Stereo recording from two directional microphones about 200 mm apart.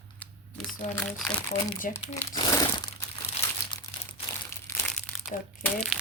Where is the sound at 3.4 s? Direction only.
30° left (ahead or behind).